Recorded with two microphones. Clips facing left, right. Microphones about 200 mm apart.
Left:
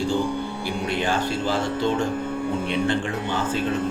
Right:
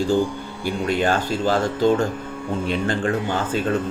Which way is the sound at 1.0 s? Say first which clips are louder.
Right 3 dB; 45° right (ahead or behind).